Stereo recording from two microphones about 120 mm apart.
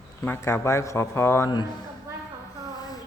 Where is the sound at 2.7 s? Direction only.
35° left (ahead or behind).